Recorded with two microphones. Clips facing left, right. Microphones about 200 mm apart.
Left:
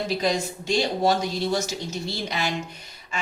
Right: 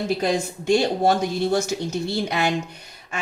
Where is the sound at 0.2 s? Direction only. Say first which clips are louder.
Right 2 dB; 55° right (ahead or behind).